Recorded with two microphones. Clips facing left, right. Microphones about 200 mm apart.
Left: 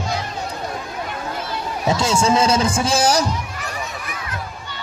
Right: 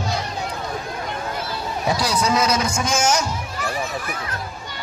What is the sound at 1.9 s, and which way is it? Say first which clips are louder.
Speech: left 4 dB; 25° left (ahead or behind).